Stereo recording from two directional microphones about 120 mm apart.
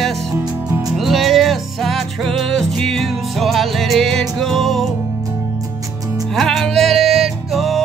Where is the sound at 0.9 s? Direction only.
Centre (ahead or behind).